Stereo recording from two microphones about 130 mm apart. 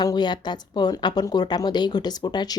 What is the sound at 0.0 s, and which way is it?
A woman's voice, 35° left (ahead or behind).